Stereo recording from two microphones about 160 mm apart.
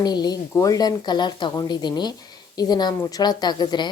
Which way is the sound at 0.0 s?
25° left (ahead or behind).